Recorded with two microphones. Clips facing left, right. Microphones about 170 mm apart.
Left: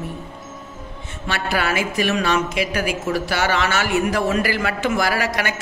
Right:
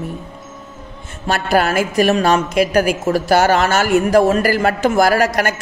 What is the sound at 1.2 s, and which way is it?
A woman's voice, 45° right (ahead or behind).